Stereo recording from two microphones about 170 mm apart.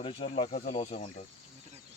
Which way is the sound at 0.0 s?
35° left (ahead or behind).